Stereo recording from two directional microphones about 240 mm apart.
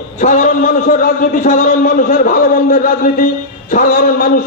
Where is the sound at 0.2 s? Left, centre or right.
Left.